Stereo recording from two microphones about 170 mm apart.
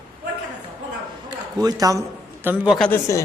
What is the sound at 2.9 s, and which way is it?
Speech, 15° left (ahead or behind).